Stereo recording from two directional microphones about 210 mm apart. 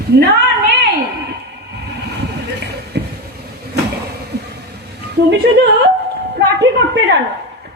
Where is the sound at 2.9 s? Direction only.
50° right (ahead or behind).